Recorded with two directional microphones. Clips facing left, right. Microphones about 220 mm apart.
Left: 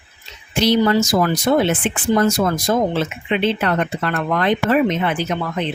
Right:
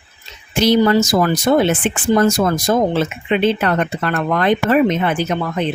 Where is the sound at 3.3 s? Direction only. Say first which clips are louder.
Right 3 dB; 45° right (ahead or behind).